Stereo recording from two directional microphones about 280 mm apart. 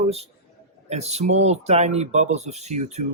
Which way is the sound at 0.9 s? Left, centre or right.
Right.